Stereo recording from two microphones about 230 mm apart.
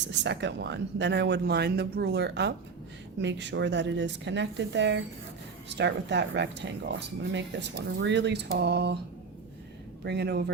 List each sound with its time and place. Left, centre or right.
0.1 s speech: right
10.0 s speech: right